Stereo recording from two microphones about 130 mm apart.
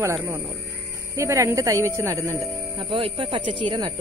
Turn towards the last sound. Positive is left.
turn(degrees=-35)  # may be behind; listen again after turning